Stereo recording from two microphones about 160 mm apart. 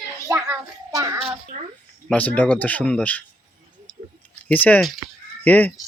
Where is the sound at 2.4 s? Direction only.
10° left (ahead or behind).